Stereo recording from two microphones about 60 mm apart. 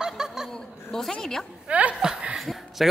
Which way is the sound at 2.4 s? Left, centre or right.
Centre.